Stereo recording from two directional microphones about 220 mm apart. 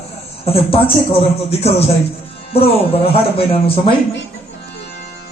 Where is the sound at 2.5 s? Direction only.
25° left (ahead or behind).